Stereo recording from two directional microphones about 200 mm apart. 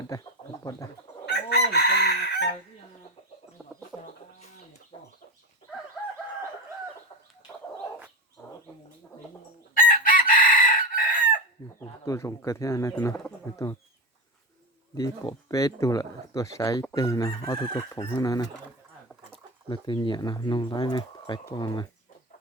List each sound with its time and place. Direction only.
0.0 s bird: 20° left (ahead or behind)
1.2 s chicken: 55° left (ahead or behind)
3.6 s chicken: centre (ahead or behind)
4.9 s chicken: 25° left (ahead or behind)
9.7 s chicken: 45° left (ahead or behind)
11.6 s chicken: 15° left (ahead or behind)
12.0 s speech: 15° left (ahead or behind)
14.9 s speech: 15° left (ahead or behind)
19.6 s speech: 20° left (ahead or behind)